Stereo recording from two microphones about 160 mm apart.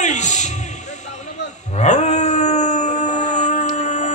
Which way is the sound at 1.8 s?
45° left (ahead or behind).